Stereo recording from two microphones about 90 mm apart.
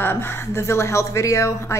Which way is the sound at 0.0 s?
25° left (ahead or behind).